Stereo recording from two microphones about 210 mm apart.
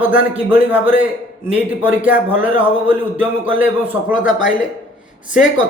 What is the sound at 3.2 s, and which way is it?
Speech, 10° right (ahead or behind).